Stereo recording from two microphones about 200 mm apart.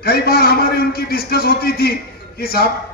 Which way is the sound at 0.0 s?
50° left (ahead or behind).